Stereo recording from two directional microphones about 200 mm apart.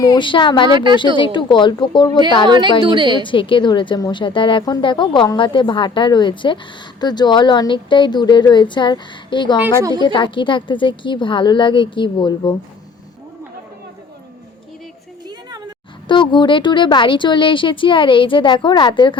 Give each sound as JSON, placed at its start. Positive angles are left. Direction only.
{"t": 0.0, "sound": "speech", "side_deg": 20}
{"t": 0.7, "sound": "a woman's voice", "side_deg": -20}
{"t": 1.2, "sound": "speech", "side_deg": 25}
{"t": 2.5, "sound": "a woman's voice", "side_deg": -20}
{"t": 3.2, "sound": "speech", "side_deg": 25}
{"t": 15.3, "sound": "a sound", "side_deg": -20}
{"t": 16.0, "sound": "speech", "side_deg": 25}